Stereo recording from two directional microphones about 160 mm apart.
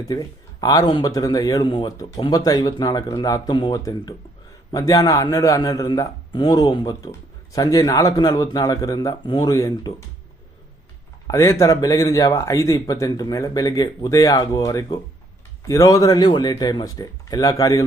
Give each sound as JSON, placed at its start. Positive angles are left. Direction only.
{"t": 0.0, "sound": "speech", "side_deg": 25}
{"t": 11.3, "sound": "speech", "side_deg": 20}